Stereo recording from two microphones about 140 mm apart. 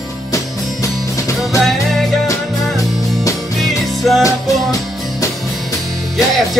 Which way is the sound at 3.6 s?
Centre (ahead or behind).